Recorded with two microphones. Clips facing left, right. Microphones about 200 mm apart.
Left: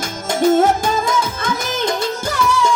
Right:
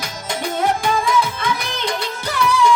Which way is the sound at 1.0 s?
45° left (ahead or behind).